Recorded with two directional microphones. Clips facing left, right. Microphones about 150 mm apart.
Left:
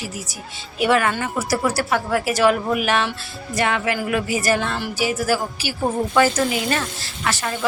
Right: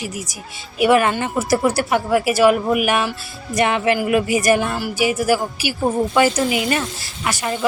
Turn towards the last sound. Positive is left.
turn(degrees=-15)  # may be behind; listen again after turning